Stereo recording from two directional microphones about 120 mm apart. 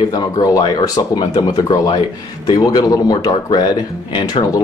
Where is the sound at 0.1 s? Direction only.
30° left (ahead or behind).